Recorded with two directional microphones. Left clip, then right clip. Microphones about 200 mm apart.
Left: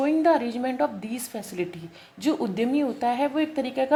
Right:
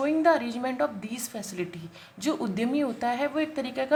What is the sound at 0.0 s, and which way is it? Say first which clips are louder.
Speech: left 2 dB; 15° left (ahead or behind).